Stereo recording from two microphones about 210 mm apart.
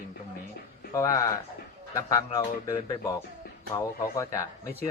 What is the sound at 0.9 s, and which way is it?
A man's voice, 15° left (ahead or behind).